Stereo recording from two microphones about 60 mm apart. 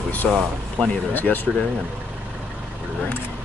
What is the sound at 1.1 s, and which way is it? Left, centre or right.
Speech, left.